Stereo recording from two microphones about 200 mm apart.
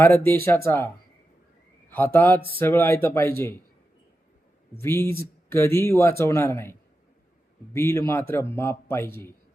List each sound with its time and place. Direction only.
0.3 s a man's voice: 10° left (ahead or behind)
1.9 s a man's voice: 10° left (ahead or behind)
4.8 s a man's voice: 10° left (ahead or behind)